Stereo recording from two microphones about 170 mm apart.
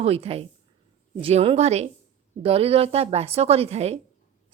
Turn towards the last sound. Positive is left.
turn(degrees=-40)  # may be behind; listen again after turning